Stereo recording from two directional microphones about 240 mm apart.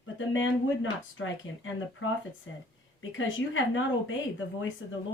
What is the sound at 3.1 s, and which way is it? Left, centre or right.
Speech, left.